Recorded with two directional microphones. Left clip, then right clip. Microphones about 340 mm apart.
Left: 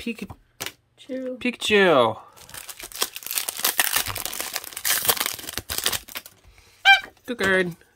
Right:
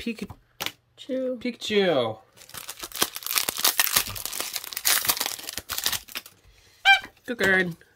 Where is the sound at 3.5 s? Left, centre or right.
Centre.